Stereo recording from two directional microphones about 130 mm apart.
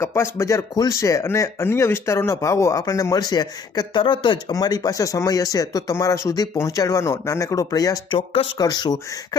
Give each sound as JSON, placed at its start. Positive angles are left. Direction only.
{"t": 0.0, "sound": "speech", "side_deg": 20}